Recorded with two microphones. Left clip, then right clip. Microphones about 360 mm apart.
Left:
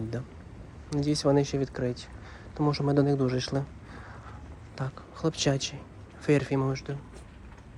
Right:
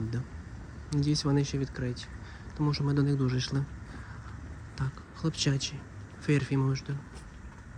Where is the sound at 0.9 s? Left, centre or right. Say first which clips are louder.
Left 5 dB; centre.